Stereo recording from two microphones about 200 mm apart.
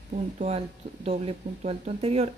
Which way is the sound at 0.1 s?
30° right (ahead or behind).